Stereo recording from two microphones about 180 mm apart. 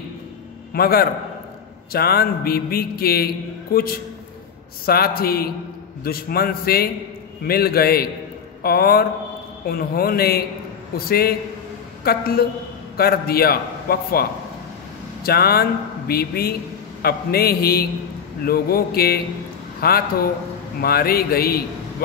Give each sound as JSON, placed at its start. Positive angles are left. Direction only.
{"t": 0.7, "sound": "a man's voice", "side_deg": 60}
{"t": 15.2, "sound": "a man's voice", "side_deg": 60}